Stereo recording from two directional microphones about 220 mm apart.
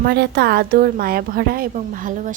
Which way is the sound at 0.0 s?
45° right (ahead or behind).